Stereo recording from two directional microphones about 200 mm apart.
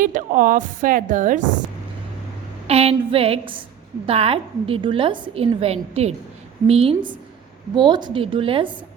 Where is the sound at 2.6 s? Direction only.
30° right (ahead or behind).